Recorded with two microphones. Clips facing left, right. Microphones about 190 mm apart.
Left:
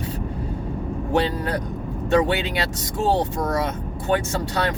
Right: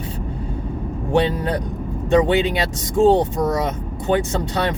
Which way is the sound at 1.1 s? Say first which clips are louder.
Right 4 dB; 25° right (ahead or behind).